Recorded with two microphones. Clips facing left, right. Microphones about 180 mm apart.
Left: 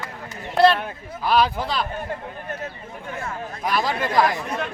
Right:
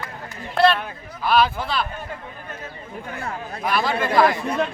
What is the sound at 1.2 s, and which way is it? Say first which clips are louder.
Speech: right 1 dB; 15° left (ahead or behind).